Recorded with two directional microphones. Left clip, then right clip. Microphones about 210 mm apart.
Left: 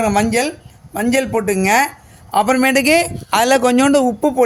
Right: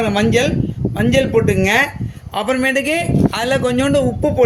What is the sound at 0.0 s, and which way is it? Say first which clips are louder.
A man's voice: even; 50° left (ahead or behind).